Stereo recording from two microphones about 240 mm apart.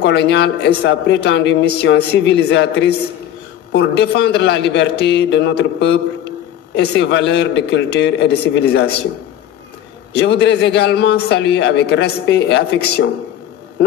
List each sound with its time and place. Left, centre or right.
0.0 s a man's voice: left
10.1 s a man's voice: left